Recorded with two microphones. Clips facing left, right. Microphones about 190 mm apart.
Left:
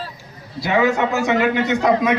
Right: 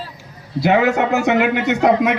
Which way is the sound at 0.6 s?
65° right (ahead or behind).